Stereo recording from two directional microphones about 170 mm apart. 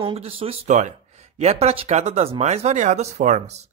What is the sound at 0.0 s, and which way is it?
Speech, 35° right (ahead or behind).